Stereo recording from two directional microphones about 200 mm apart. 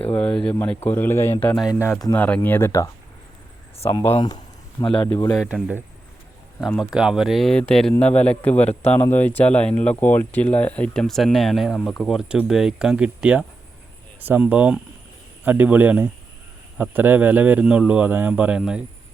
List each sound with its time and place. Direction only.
0.1 s speech: 5° left (ahead or behind); by 5.0 s 25° left (ahead or behind)
5.3 s speech: centre (ahead or behind)